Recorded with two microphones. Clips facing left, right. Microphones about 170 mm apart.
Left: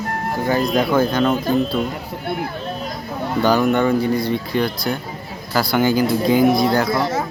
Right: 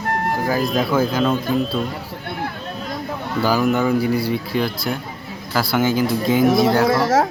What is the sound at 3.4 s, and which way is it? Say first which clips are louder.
Speech: left 2 dB; 5° right (ahead or behind).